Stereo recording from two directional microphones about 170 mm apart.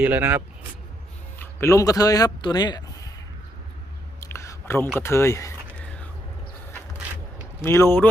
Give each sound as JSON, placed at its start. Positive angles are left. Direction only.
{"t": 0.0, "sound": "speech", "side_deg": -10}
{"t": 1.4, "sound": "speech", "side_deg": 15}
{"t": 4.2, "sound": "whispering", "side_deg": 15}
{"t": 4.9, "sound": "speech", "side_deg": 15}
{"t": 5.8, "sound": "biting", "side_deg": 10}
{"t": 7.6, "sound": "speech", "side_deg": 15}